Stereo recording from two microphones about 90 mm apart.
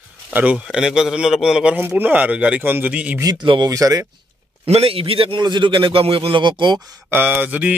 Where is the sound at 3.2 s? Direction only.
50° right (ahead or behind).